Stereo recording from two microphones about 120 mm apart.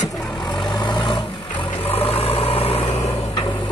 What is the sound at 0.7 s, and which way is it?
Vehicle, 40° left (ahead or behind).